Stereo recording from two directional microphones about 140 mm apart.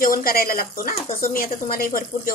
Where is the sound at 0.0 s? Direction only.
90° left.